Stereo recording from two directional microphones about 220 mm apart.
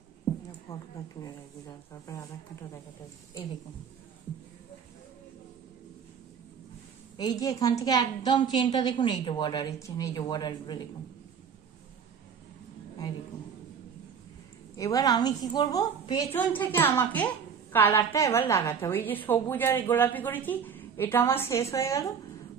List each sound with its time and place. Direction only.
0.7 s a woman's voice: 15° left (ahead or behind)
7.2 s a woman's voice: 15° left (ahead or behind)
14.8 s a woman's voice: 15° left (ahead or behind)